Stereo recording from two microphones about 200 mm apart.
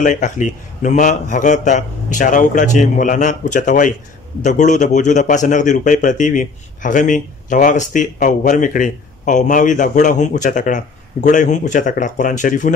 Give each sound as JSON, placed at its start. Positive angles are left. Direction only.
{"t": 0.0, "sound": "a man's voice", "side_deg": 40}